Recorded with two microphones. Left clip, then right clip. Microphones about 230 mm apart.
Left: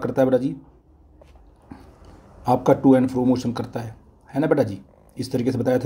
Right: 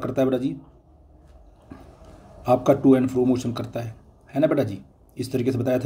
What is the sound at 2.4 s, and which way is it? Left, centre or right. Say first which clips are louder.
Speech: left 1 dB; centre.